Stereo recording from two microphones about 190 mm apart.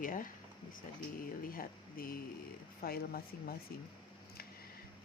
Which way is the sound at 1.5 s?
50° left (ahead or behind).